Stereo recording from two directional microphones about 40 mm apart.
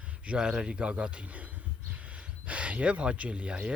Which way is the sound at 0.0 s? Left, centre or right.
Right.